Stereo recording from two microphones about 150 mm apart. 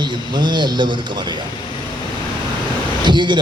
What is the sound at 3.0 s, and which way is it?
Speech, 30° right (ahead or behind).